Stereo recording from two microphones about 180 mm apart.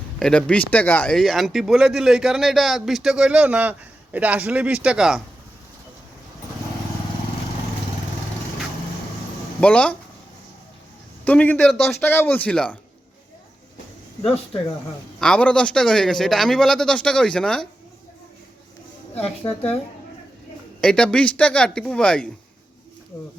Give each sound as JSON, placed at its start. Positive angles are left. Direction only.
{"t": 0.2, "sound": "speech", "side_deg": 5}
{"t": 9.6, "sound": "speech", "side_deg": 5}
{"t": 11.3, "sound": "speech", "side_deg": 10}
{"t": 12.0, "sound": "speech", "side_deg": 10}
{"t": 15.2, "sound": "speech", "side_deg": 5}
{"t": 19.2, "sound": "speech", "side_deg": 35}
{"t": 20.8, "sound": "speech", "side_deg": 5}